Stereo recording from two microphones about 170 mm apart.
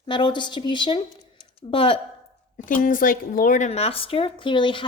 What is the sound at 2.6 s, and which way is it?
Speech, 50° left (ahead or behind).